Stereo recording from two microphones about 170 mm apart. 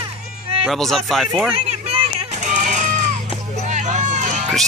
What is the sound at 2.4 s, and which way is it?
Music, 45° right (ahead or behind).